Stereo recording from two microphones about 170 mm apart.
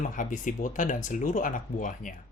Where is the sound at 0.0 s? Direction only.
50° left (ahead or behind).